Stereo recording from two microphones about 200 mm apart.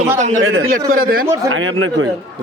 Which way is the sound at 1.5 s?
75° right (ahead or behind).